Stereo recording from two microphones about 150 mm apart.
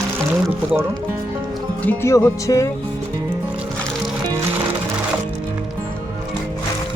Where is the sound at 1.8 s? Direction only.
15° left (ahead or behind).